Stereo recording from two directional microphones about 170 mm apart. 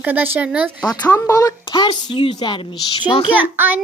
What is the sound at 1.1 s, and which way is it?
A woman's voice, 20° left (ahead or behind).